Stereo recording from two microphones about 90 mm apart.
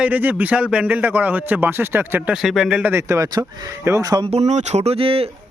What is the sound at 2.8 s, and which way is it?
Speech, 30° right (ahead or behind).